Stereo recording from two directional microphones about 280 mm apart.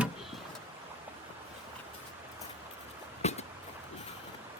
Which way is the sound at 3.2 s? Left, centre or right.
Left.